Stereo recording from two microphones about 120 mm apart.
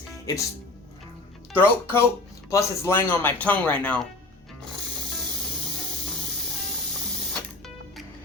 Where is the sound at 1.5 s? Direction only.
20° left (ahead or behind).